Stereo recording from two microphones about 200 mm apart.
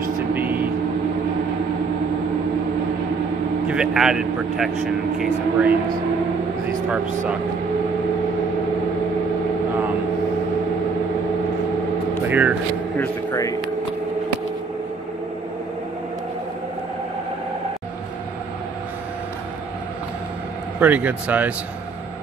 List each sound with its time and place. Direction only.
0.3 s vehicle: 10° right (ahead or behind)
3.6 s speech: 5° right (ahead or behind)
12.3 s speech: 10° right (ahead or behind)
12.9 s speech: 10° left (ahead or behind)
20.8 s speech: 5° right (ahead or behind)